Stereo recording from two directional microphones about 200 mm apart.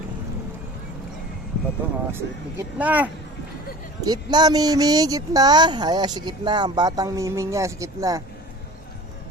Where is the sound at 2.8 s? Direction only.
5° right (ahead or behind).